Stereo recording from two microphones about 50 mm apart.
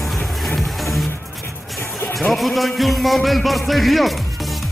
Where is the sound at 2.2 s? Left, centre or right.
Centre.